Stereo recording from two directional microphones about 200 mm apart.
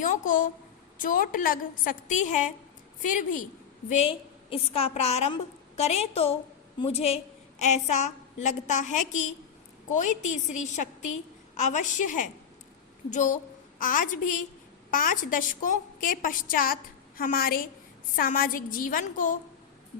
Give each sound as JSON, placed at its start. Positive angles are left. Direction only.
{"t": 0.0, "sound": "a woman's voice", "side_deg": 40}